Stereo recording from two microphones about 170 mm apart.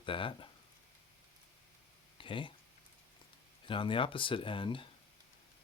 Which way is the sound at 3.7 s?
30° left (ahead or behind).